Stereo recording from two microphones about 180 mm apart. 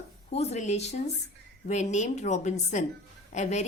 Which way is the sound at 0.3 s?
35° left (ahead or behind).